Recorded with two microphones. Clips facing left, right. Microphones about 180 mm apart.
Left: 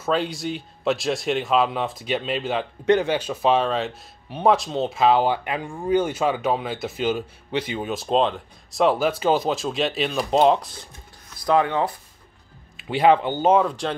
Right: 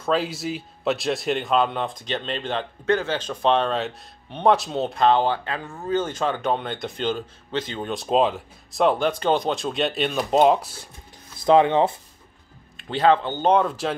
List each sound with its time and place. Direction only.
0.0 s a man's voice: centre (ahead or behind)
11.3 s speech: 25° right (ahead or behind)
12.7 s a man's voice: 5° left (ahead or behind)